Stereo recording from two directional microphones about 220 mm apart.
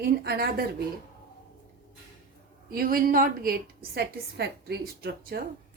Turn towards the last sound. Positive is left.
turn(degrees=-45)  # may be behind; listen again after turning